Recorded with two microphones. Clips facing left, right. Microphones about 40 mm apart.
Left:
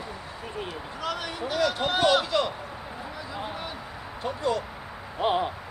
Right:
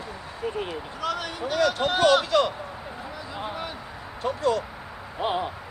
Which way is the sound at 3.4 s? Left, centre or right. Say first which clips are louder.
Right 3 dB; centre.